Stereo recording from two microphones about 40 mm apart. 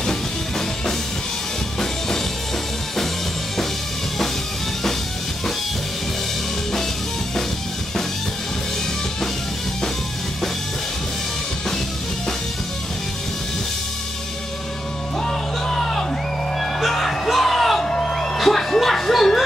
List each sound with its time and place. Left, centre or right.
0.0 s music: centre
15.1 s music: centre
17.8 s music: centre
18.4 s music: centre